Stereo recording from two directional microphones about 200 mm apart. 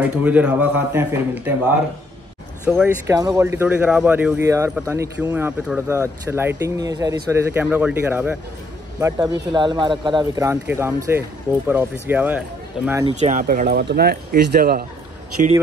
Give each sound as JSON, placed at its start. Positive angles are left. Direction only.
{"t": 0.0, "sound": "speech", "side_deg": -5}
{"t": 2.6, "sound": "speech", "side_deg": -5}
{"t": 3.2, "sound": "speech", "side_deg": -15}
{"t": 9.0, "sound": "a man's voice", "side_deg": -20}
{"t": 13.0, "sound": "speech", "side_deg": -35}